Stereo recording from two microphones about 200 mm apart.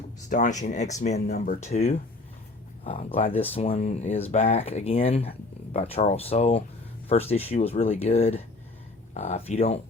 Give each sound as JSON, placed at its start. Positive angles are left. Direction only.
{"t": 0.3, "sound": "speech", "side_deg": 40}